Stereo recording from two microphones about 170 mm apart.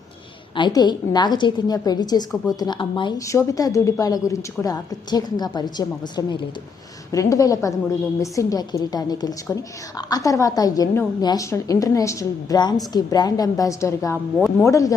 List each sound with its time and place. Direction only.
0.5 s a woman's voice: 25° left (ahead or behind)